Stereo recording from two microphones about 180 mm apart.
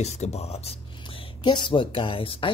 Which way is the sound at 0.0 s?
35° left (ahead or behind).